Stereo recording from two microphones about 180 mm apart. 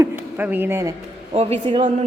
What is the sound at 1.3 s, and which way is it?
Speech, 35° right (ahead or behind).